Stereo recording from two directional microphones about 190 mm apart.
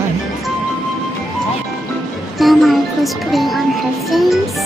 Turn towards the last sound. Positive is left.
turn(degrees=0)  # may be behind; listen again after turning